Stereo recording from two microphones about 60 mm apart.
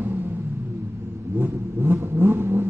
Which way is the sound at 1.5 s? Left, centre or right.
Right.